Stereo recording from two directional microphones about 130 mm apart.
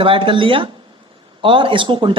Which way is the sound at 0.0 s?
40° right (ahead or behind).